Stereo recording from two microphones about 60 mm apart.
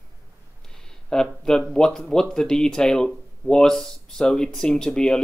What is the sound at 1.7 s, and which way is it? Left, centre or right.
Speech, centre.